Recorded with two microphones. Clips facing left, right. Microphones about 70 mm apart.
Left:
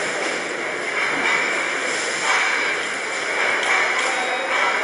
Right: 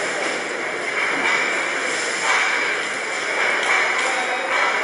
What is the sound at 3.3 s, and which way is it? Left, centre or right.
Ping, centre.